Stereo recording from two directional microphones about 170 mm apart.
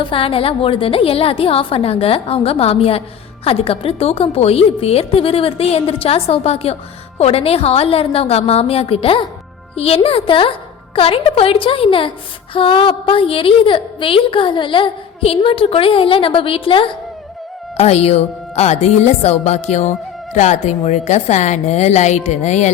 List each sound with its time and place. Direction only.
0.0 s a woman's voice: 30° left (ahead or behind)